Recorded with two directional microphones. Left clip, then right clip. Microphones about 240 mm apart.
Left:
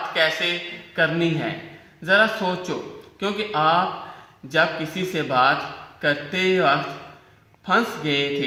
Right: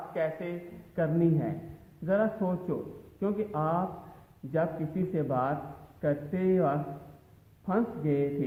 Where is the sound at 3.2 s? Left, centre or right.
Centre.